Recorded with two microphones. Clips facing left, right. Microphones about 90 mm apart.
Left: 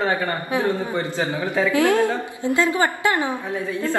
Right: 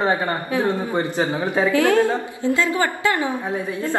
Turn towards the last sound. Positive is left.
turn(degrees=-20)  # may be behind; listen again after turning